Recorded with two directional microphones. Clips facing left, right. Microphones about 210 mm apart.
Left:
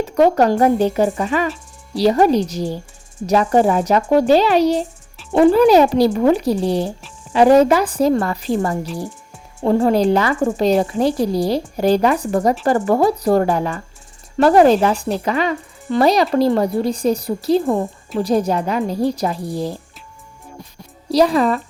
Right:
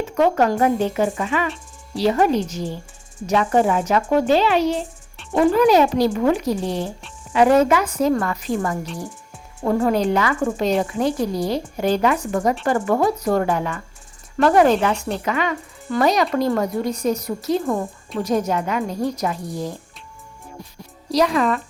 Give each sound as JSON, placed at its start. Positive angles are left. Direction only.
{"t": 0.0, "sound": "speech", "side_deg": 35}
{"t": 21.1, "sound": "speech", "side_deg": 30}